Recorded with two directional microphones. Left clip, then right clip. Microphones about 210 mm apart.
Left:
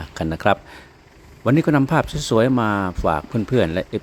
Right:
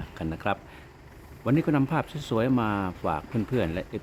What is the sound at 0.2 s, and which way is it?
Speech, 30° left (ahead or behind).